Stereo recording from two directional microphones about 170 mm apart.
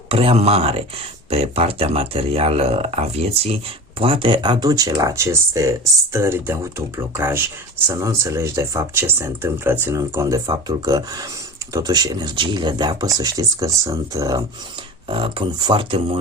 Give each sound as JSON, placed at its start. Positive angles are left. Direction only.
{"t": 0.1, "sound": "speech", "side_deg": -35}